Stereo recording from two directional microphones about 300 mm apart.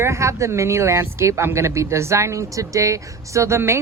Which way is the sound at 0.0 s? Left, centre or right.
Centre.